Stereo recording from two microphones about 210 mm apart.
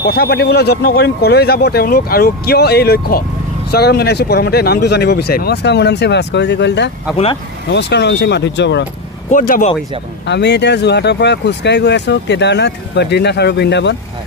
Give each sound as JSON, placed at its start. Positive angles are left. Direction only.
{"t": 0.0, "sound": "speech", "side_deg": 45}
{"t": 9.3, "sound": "speech", "side_deg": 40}
{"t": 10.2, "sound": "speech", "side_deg": 55}